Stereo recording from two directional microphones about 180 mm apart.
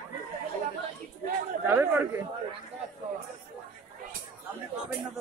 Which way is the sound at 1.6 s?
15° right (ahead or behind).